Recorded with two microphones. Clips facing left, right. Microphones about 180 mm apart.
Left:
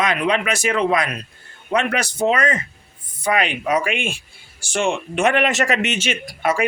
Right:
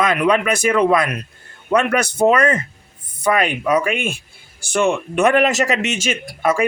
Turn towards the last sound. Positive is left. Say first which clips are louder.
# right 2 dB
turn(degrees=-40)  # may be behind; listen again after turning